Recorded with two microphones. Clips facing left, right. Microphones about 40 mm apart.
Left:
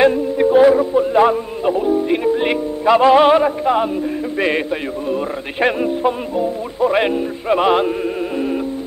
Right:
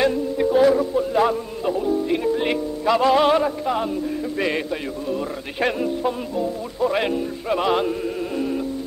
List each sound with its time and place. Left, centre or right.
0.0 s a man's voice: left